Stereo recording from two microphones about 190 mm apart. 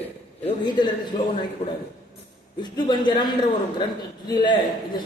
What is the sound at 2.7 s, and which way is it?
A man's voice, 20° left (ahead or behind).